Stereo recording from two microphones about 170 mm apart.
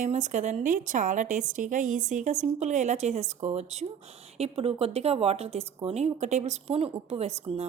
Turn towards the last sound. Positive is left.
turn(degrees=-35)  # may be behind; listen again after turning